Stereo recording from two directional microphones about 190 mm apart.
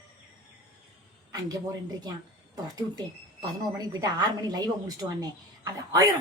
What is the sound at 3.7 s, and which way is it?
A woman's voice, 20° right (ahead or behind).